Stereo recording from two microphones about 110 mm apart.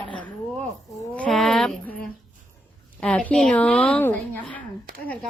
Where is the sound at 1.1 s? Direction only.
5° left (ahead or behind).